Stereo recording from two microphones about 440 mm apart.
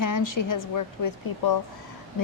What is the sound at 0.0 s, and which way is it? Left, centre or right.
A woman's voice, left.